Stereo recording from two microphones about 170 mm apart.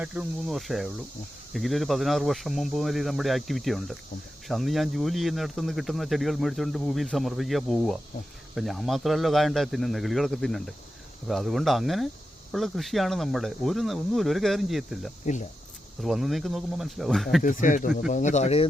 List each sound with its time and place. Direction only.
0.0 s speech: 5° right (ahead or behind)
15.2 s speech: 45° left (ahead or behind)
16.0 s speech: centre (ahead or behind)
17.4 s speech: 50° left (ahead or behind)